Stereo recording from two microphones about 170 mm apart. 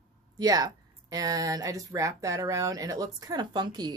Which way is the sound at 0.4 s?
20° right (ahead or behind).